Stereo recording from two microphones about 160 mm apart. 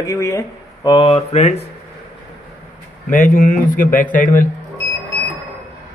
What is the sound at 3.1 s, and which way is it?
Speech, 55° left (ahead or behind).